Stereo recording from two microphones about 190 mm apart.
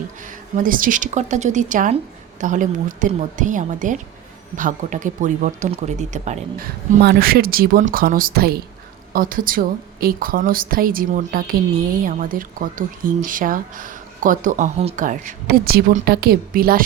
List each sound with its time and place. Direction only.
0.2 s speech: 45° right (ahead or behind)
7.0 s speech: 55° right (ahead or behind)